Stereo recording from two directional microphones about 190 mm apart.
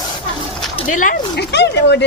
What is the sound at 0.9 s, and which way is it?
Speech, 45° left (ahead or behind).